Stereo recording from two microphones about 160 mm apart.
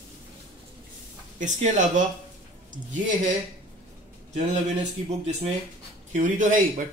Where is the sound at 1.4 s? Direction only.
50° right (ahead or behind).